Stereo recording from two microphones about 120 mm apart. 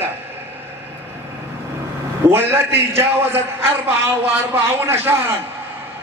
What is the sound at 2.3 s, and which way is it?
A man's voice, 20° right (ahead or behind).